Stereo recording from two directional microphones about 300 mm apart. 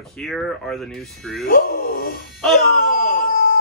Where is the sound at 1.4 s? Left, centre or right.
Left.